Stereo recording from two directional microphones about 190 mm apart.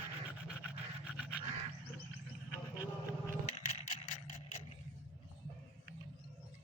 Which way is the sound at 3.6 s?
40° left (ahead or behind).